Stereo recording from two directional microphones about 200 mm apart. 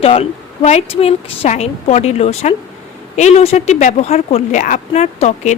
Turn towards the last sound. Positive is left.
turn(degrees=35)  # may be behind; listen again after turning